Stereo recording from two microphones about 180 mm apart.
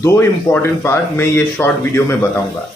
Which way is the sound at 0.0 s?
15° left (ahead or behind).